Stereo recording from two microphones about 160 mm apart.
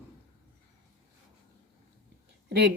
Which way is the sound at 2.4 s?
90° right.